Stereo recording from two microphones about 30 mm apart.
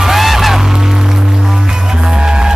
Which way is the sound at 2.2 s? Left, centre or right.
Right.